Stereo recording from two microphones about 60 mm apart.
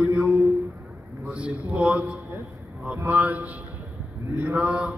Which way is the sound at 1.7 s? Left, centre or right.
Right.